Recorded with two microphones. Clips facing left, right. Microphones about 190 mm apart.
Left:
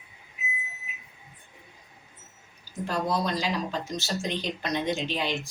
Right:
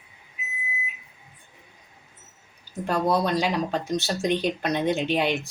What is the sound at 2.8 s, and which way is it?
Speech, 60° right (ahead or behind).